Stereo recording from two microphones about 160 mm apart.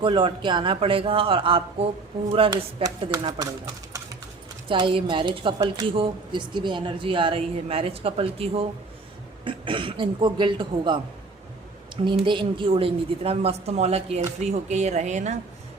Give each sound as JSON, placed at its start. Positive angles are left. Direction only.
{"t": 0.0, "sound": "a woman's voice", "side_deg": -30}
{"t": 3.1, "sound": "speech", "side_deg": -25}
{"t": 4.7, "sound": "a woman's voice", "side_deg": -30}
{"t": 12.0, "sound": "a woman's voice", "side_deg": -30}